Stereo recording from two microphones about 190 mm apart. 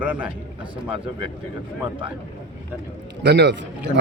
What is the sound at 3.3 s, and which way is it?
Speech, 65° right (ahead or behind).